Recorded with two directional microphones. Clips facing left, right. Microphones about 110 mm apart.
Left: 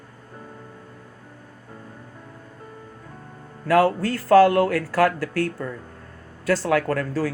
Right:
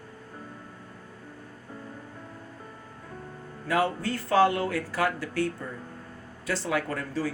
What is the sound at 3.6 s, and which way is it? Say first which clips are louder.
Speech: left 8 dB; 85° left.